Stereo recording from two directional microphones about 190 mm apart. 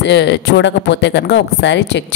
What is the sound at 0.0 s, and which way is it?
Speech, 65° left (ahead or behind).